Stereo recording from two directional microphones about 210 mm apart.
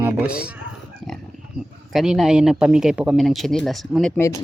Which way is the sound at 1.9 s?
Centre (ahead or behind).